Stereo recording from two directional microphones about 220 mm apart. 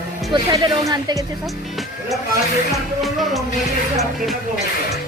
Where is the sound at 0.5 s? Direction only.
20° right (ahead or behind).